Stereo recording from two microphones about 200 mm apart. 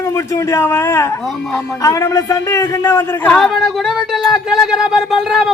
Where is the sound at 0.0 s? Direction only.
15° left (ahead or behind).